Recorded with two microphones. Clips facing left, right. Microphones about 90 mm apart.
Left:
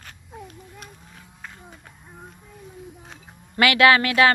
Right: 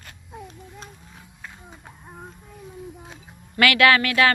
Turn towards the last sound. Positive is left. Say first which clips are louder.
# left 1 dB
turn(degrees=25)  # may be behind; listen again after turning